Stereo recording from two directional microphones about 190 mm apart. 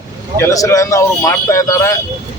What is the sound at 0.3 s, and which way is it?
Speech, 15° left (ahead or behind).